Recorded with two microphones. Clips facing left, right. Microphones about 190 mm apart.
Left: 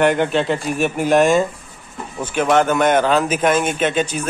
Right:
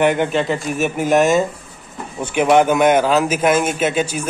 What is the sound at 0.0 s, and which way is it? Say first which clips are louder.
A man's voice: even; 10° right (ahead or behind).